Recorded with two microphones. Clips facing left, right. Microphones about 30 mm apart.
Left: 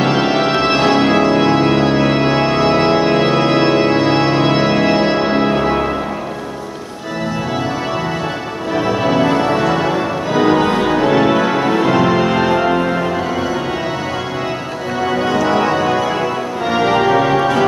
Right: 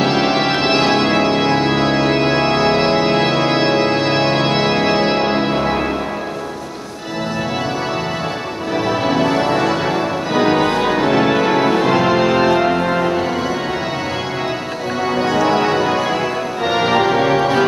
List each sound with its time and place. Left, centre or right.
0.0 s organ: centre
1.8 s music: right
8.7 s music: centre
15.0 s music: centre